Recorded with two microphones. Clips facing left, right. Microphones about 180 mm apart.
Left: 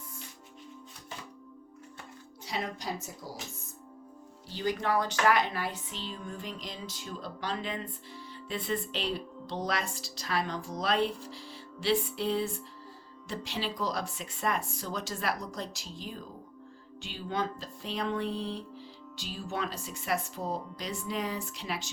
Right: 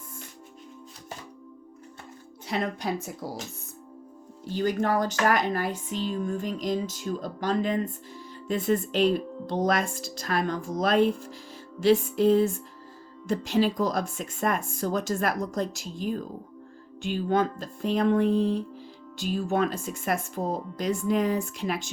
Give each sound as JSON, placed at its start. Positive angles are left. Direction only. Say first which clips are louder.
{"t": 2.5, "sound": "a woman's voice", "louder": "right 7 dB", "side_deg": -60}
{"t": 4.4, "sound": "speech", "louder": "right 6 dB", "side_deg": -50}